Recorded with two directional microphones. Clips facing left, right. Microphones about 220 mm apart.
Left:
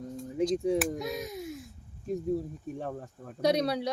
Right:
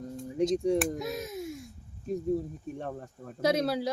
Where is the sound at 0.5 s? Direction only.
Centre (ahead or behind).